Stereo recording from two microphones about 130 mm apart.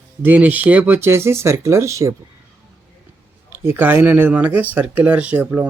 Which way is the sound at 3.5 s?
20° right (ahead or behind).